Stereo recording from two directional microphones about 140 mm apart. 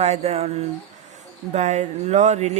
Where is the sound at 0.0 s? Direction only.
50° right (ahead or behind).